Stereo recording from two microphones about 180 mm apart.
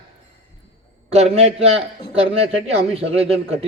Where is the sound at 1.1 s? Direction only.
35° right (ahead or behind).